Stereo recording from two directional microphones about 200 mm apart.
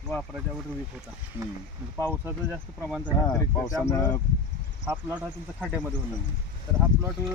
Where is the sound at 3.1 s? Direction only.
20° left (ahead or behind).